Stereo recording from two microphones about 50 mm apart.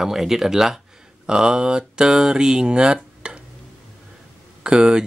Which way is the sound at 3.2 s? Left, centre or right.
Centre.